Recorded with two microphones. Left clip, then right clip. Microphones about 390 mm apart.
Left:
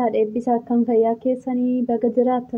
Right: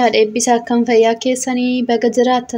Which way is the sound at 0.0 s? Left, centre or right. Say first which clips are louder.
Right 7 dB; left.